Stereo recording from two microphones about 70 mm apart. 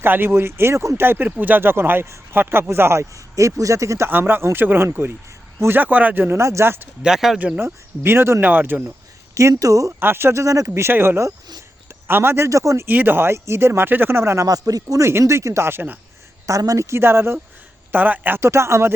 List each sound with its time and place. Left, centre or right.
0.0 s speech: right
4.1 s speech: right
6.4 s speech: right
7.0 s speech: centre
7.3 s speech: right
7.6 s speech: right
9.3 s speech: right
10.0 s speech: right
10.4 s speech: right
10.8 s speech: right
12.5 s speech: right
12.9 s speech: right
14.4 s speech: right
16.5 s speech: right